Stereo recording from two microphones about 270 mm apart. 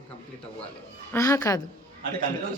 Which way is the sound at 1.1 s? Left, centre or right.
Centre.